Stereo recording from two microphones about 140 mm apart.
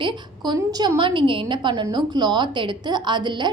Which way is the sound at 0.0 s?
30° right (ahead or behind).